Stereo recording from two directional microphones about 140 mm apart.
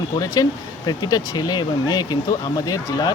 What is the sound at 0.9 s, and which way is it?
Speech, 30° left (ahead or behind).